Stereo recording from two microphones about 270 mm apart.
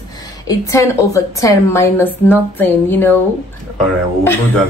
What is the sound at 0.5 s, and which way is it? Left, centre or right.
A woman's voice, centre.